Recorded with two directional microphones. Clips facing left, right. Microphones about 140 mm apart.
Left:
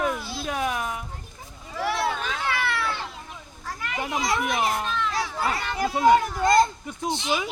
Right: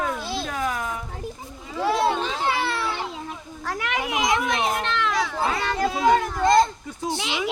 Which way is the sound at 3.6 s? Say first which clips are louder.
Right 4 dB; 80° right.